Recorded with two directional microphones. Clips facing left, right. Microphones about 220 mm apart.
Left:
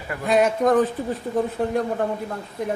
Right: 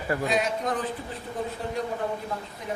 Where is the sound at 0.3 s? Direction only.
55° left (ahead or behind).